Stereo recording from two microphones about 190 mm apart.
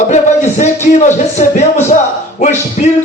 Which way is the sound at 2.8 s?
45° left (ahead or behind).